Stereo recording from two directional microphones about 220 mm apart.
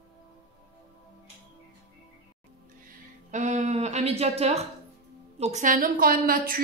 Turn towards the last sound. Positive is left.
turn(degrees=-40)  # may be behind; listen again after turning